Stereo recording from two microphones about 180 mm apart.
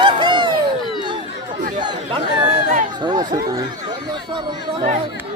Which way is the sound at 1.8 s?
25° right (ahead or behind).